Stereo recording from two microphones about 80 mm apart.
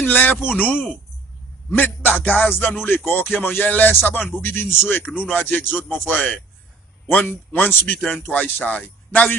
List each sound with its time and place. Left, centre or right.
0.0 s speech: left